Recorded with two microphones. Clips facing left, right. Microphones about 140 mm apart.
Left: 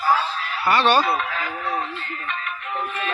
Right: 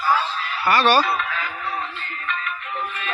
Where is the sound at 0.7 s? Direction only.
25° left (ahead or behind).